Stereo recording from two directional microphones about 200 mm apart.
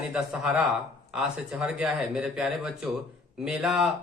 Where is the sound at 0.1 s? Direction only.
5° right (ahead or behind).